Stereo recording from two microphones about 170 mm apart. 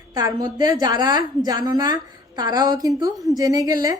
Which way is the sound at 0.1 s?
20° right (ahead or behind).